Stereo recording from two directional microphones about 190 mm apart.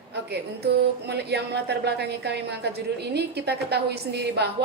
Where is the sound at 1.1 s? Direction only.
60° right (ahead or behind).